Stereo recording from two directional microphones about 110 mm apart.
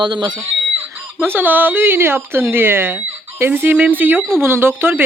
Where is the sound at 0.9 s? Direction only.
20° right (ahead or behind).